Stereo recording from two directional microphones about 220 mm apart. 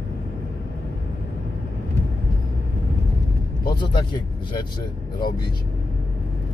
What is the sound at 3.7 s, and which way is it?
Vehicle, 20° left (ahead or behind).